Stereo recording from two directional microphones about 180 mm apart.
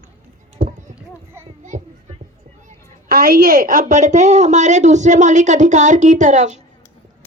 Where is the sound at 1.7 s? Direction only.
45° right (ahead or behind).